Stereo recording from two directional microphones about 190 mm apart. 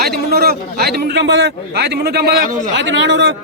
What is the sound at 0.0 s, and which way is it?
A man's voice, 55° right (ahead or behind).